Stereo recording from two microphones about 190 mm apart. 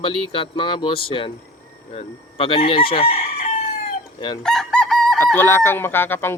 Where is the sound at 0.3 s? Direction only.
30° left (ahead or behind).